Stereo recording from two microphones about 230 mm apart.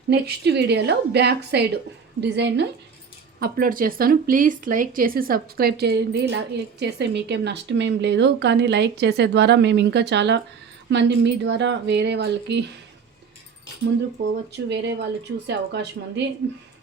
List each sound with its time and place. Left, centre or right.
0.1 s speech: right
14.5 s speech: right